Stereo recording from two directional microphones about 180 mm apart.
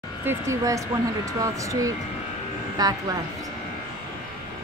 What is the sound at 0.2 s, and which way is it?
Speech, 15° right (ahead or behind).